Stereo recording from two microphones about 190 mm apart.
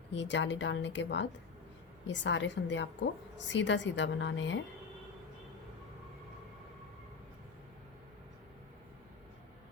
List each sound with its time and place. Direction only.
0.1 s a woman's voice: 70° left (ahead or behind)